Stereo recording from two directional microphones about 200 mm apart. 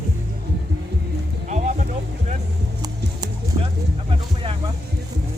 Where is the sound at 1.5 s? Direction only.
40° right (ahead or behind).